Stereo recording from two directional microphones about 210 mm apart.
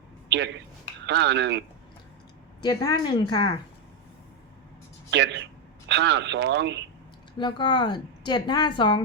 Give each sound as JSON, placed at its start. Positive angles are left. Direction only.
{"t": 0.3, "sound": "speech", "side_deg": -55}
{"t": 2.6, "sound": "speech", "side_deg": 20}
{"t": 5.1, "sound": "speech", "side_deg": -55}
{"t": 7.3, "sound": "speech", "side_deg": 20}